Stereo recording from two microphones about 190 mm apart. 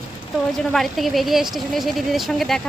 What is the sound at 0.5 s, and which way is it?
A woman's voice, centre (ahead or behind).